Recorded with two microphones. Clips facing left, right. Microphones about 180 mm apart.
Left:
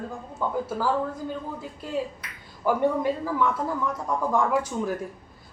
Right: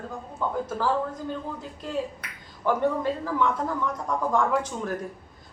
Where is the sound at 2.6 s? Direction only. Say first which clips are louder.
Left 1 dB; 10° left (ahead or behind).